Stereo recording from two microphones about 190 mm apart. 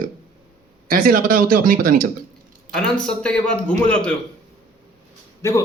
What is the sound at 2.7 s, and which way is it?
A man's voice, 5° left (ahead or behind).